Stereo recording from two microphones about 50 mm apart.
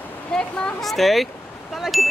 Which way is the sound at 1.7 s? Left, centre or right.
Centre.